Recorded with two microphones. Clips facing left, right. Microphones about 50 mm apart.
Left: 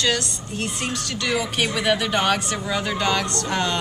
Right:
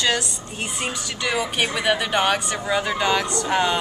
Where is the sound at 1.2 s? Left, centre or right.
Centre.